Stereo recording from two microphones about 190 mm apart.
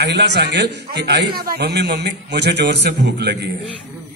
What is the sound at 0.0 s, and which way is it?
A man's voice, 65° right (ahead or behind).